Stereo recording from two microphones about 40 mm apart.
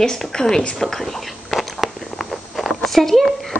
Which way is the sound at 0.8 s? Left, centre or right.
Centre.